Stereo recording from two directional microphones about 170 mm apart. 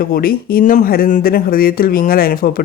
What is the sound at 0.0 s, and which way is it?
Speech, 60° left (ahead or behind).